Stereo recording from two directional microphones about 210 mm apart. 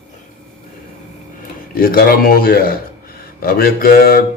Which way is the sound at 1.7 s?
45° left (ahead or behind).